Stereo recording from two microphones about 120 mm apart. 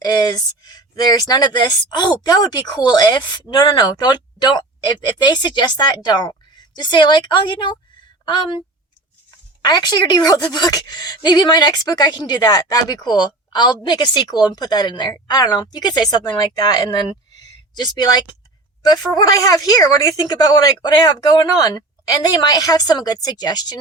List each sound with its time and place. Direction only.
0.0 s speech: 35° left (ahead or behind)
9.6 s speech: 35° left (ahead or behind)